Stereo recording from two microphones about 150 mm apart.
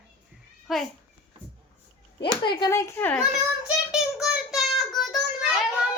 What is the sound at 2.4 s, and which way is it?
Speech, 30° left (ahead or behind).